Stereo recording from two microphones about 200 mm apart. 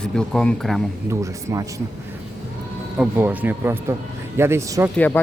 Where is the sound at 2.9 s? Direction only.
10° right (ahead or behind).